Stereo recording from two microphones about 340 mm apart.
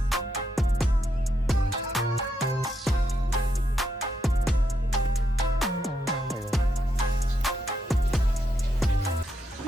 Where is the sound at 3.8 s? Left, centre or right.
Centre.